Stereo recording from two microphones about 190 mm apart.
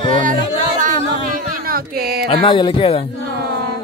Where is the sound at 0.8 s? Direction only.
45° right (ahead or behind).